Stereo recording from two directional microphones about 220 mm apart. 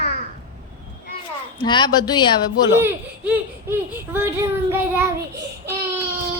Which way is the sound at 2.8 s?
10° right (ahead or behind).